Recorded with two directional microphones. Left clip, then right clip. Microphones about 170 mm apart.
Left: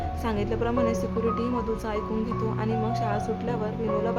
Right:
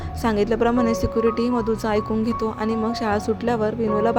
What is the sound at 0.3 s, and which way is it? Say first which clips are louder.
Speech: right 9 dB; 35° right (ahead or behind).